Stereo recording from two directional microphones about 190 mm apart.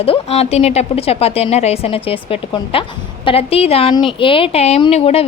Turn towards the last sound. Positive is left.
turn(degrees=35)  # may be behind; listen again after turning